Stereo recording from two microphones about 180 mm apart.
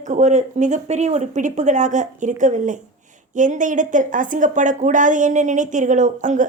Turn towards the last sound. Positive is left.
turn(degrees=-45)  # may be behind; listen again after turning